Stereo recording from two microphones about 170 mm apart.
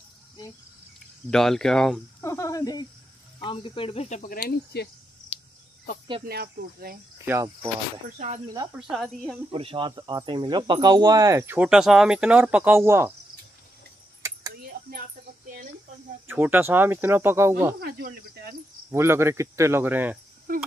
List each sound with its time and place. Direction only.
0.9 s speech: centre (ahead or behind)
2.2 s snake: 15° left (ahead or behind)
3.3 s speech: 30° left (ahead or behind); by 4.8 s 60° left (ahead or behind)
6.2 s speech: 70° right (ahead or behind)
7.2 s speech: 15° right (ahead or behind)
8.7 s a woman's voice: centre (ahead or behind)
9.5 s speech: 30° right (ahead or behind); by 13.1 s 15° right (ahead or behind)
14.7 s a sound: 65° right (ahead or behind)
16.3 s speech: 10° right (ahead or behind)
17.7 s speech: 65° right (ahead or behind)
18.9 s speech: 15° right (ahead or behind)
20.5 s speech: 50° right (ahead or behind)